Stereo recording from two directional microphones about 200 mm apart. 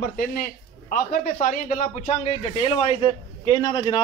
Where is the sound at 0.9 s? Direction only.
45° left (ahead or behind).